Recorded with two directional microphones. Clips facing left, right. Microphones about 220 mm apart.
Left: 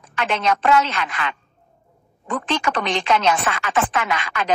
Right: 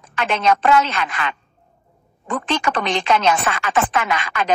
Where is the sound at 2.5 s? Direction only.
50° right (ahead or behind).